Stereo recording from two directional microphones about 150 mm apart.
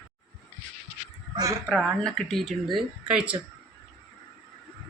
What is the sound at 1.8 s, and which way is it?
Speech, 5° left (ahead or behind).